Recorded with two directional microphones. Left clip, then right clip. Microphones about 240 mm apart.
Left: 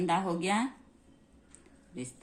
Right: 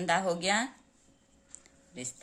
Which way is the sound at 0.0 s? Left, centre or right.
Right.